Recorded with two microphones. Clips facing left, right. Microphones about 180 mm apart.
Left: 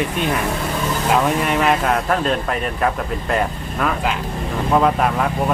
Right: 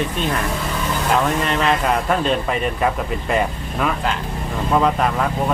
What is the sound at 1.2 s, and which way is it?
Speech, 10° left (ahead or behind).